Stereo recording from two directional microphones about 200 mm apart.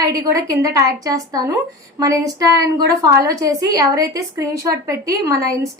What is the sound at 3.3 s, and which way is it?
A woman's voice, 15° right (ahead or behind).